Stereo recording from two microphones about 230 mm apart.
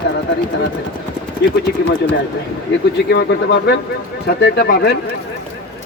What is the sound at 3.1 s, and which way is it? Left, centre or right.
Speech, left.